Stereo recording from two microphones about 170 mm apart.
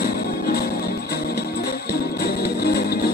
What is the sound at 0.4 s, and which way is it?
Music, 65° left (ahead or behind).